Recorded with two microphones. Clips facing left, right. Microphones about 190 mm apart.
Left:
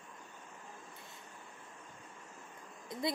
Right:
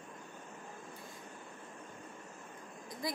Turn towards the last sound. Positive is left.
turn(degrees=25)  # may be behind; listen again after turning